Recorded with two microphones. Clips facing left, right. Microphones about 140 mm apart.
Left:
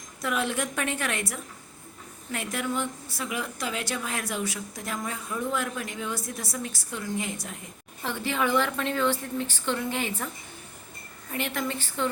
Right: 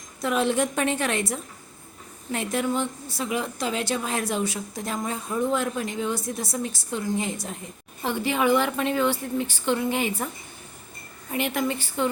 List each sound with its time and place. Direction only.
0.2 s a woman's voice: 25° right (ahead or behind)
8.0 s a woman's voice: 15° right (ahead or behind)
11.3 s a woman's voice: 15° right (ahead or behind)